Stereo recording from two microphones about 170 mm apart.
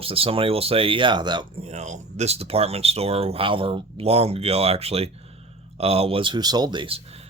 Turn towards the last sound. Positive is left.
turn(degrees=-30)  # may be behind; listen again after turning